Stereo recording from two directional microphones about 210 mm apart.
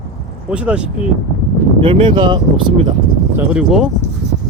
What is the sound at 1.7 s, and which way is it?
Speech, 25° right (ahead or behind).